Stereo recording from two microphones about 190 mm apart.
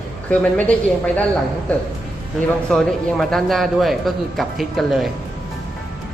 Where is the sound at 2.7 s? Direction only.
Centre (ahead or behind).